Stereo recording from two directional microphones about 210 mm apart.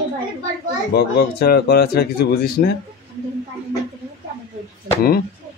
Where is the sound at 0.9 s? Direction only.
50° left (ahead or behind).